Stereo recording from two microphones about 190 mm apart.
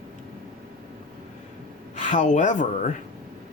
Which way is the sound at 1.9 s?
40° left (ahead or behind).